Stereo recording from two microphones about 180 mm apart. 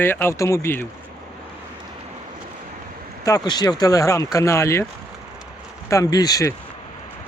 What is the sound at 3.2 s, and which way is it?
Speech, 20° left (ahead or behind).